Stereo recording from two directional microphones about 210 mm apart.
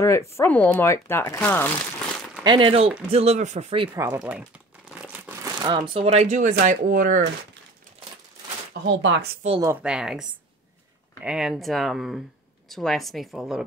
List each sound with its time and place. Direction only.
0.0 s speech: 15° left (ahead or behind)
2.4 s speech: 25° right (ahead or behind)
4.2 s crumpling: 5° right (ahead or behind)
5.6 s speech: 25° right (ahead or behind); by 7.2 s 40° right (ahead or behind)
8.8 s speech: 55° right (ahead or behind)
9.6 s speech: 10° right (ahead or behind)
11.2 s speech: centre (ahead or behind)